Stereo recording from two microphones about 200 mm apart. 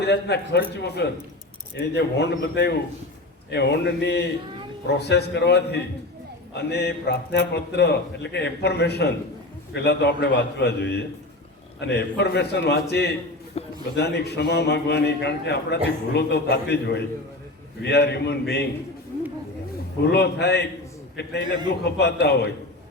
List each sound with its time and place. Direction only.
0.0 s a man's voice: 60° left (ahead or behind)
20.1 s a man's voice: 55° left (ahead or behind)